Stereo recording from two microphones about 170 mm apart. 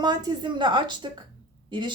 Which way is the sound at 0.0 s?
25° right (ahead or behind).